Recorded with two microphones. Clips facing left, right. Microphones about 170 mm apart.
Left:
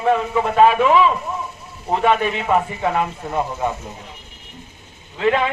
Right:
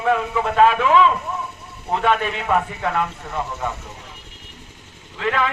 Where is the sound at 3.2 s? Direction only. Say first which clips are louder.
Left 5 dB; 25° left (ahead or behind).